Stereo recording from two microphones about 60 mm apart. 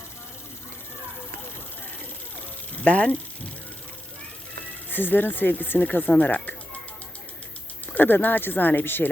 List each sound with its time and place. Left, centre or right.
2.8 s speech: left
4.9 s speech: left
7.9 s speech: left